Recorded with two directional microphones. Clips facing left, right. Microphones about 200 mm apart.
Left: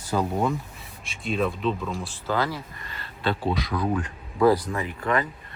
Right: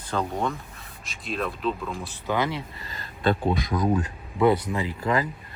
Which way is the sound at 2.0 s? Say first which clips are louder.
Even; 15° right (ahead or behind).